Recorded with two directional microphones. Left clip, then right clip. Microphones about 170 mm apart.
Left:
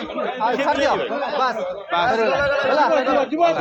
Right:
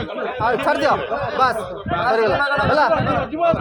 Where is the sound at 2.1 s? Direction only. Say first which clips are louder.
Right 1 dB; 45° right (ahead or behind).